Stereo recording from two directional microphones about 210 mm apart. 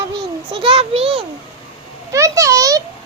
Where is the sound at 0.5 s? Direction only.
25° right (ahead or behind).